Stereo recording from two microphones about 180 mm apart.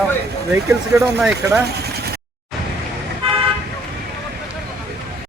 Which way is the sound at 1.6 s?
65° right (ahead or behind).